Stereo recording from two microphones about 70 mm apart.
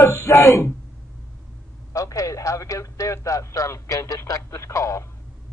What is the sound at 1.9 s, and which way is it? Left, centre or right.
A man's voice, left.